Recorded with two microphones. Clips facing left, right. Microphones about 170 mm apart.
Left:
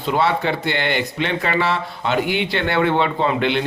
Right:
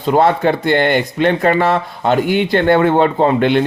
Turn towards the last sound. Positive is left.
turn(degrees=-45)  # may be behind; listen again after turning